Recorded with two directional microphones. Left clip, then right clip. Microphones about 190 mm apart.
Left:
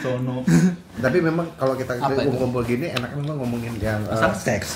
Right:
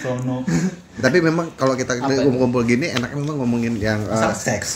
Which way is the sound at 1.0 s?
45° right (ahead or behind).